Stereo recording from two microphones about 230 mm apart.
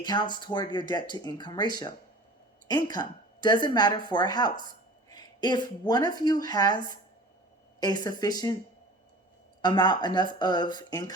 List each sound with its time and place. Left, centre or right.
0.0 s a woman's voice: centre
9.6 s speech: centre